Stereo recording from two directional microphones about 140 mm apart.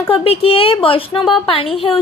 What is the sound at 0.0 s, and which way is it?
Speech, 40° left (ahead or behind).